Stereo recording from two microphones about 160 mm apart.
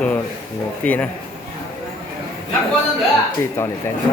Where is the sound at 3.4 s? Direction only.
15° left (ahead or behind).